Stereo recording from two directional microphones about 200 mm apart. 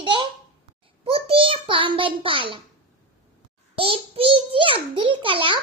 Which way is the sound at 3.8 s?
30° right (ahead or behind).